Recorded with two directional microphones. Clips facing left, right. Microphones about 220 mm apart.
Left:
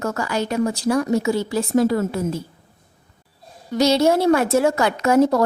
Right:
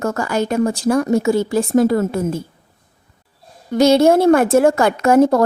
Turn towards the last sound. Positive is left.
turn(degrees=-50)  # may be behind; listen again after turning